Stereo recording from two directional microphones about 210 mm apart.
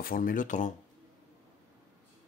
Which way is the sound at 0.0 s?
40° left (ahead or behind).